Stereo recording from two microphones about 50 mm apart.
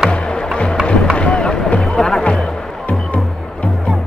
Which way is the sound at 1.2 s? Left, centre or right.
Left.